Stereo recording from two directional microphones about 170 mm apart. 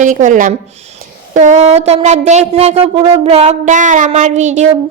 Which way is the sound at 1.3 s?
45° right (ahead or behind).